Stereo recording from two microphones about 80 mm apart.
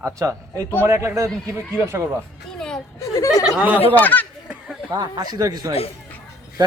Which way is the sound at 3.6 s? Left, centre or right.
Centre.